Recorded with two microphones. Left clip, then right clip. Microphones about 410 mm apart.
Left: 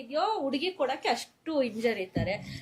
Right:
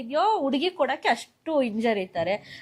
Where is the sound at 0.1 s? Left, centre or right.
Right.